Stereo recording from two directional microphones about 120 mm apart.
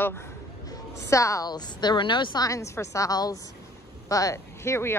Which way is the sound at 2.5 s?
25° left (ahead or behind).